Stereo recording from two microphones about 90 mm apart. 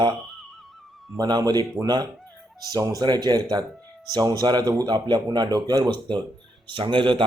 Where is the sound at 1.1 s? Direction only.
45° right (ahead or behind).